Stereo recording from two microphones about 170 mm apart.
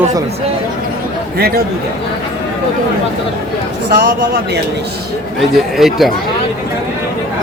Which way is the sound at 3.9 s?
60° right (ahead or behind).